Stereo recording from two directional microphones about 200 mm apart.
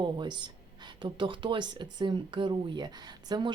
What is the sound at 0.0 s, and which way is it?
A woman's voice, 20° right (ahead or behind).